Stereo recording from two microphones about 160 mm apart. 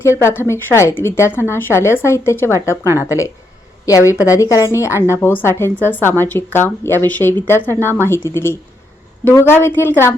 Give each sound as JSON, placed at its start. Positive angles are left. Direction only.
{"t": 0.0, "sound": "a woman's voice", "side_deg": 15}